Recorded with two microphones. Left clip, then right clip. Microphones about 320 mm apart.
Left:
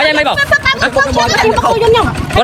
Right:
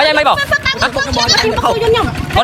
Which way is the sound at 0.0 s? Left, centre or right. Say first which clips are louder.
Right 1 dB; centre.